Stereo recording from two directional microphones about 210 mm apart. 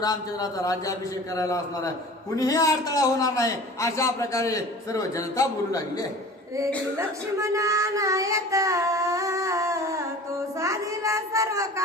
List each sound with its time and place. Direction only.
0.0 s a man's voice: 20° left (ahead or behind)
7.3 s child singing: 15° right (ahead or behind)
10.6 s a child's voice: 15° right (ahead or behind)